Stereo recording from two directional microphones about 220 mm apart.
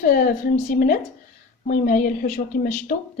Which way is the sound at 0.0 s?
35° left (ahead or behind).